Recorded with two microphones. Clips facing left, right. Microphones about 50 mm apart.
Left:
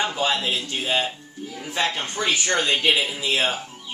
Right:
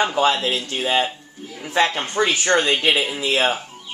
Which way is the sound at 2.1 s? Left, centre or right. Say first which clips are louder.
Right 6 dB; right.